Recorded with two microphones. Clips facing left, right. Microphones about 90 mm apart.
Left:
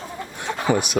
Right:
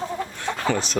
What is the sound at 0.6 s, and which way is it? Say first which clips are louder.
Speech: left 4 dB; 15° left (ahead or behind).